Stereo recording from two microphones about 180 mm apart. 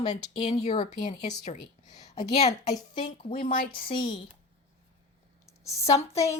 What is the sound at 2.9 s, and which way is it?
Speech, 25° left (ahead or behind).